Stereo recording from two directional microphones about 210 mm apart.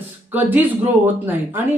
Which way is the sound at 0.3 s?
10° right (ahead or behind).